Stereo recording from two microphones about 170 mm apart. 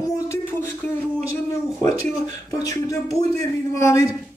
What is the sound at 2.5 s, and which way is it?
Speech, 20° left (ahead or behind).